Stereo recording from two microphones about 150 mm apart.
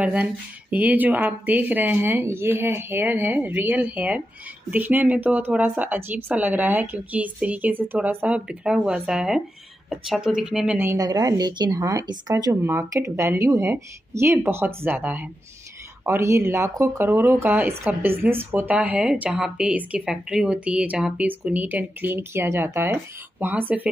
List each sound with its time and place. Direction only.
0.0 s speech: 10° right (ahead or behind)
10.8 s a woman's voice: 20° right (ahead or behind)